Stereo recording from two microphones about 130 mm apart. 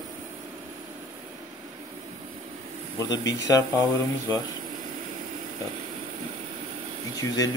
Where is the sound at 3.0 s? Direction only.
25° left (ahead or behind).